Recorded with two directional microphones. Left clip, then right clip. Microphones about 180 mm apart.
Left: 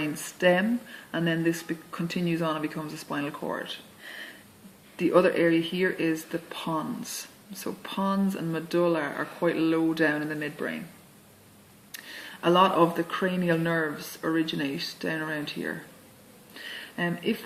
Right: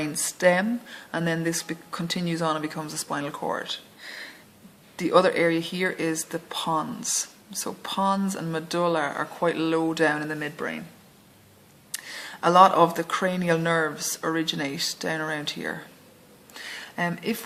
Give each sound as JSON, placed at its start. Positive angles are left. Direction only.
{"t": 0.3, "sound": "speech", "side_deg": -40}
{"t": 4.9, "sound": "speech", "side_deg": -35}
{"t": 11.9, "sound": "speech", "side_deg": -35}
{"t": 16.6, "sound": "a sound", "side_deg": -40}